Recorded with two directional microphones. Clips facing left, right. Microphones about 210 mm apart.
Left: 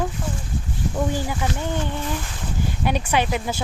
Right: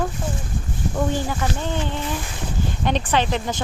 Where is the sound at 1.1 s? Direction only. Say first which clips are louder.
Right 1 dB; 15° left (ahead or behind).